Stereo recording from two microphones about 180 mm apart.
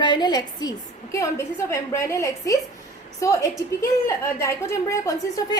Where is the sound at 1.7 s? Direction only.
15° left (ahead or behind).